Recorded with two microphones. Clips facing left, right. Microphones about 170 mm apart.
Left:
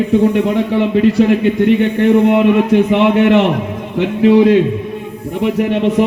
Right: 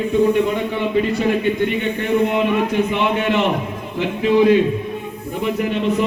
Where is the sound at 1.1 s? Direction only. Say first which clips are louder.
Left 6 dB; 85° left.